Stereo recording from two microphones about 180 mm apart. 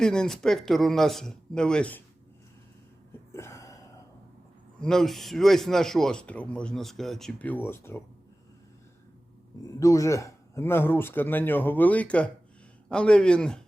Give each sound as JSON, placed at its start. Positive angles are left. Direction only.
{"t": 0.0, "sound": "a man's voice", "side_deg": 5}
{"t": 3.1, "sound": "gasp", "side_deg": 15}
{"t": 4.8, "sound": "a man's voice", "side_deg": 5}
{"t": 9.6, "sound": "a man's voice", "side_deg": 20}